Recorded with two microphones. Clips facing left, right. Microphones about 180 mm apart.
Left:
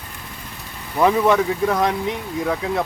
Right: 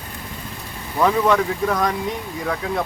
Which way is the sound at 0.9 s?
10° left (ahead or behind).